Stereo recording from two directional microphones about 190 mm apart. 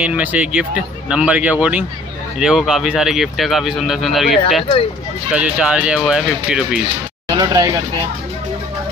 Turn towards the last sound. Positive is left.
turn(degrees=-20)  # may be behind; listen again after turning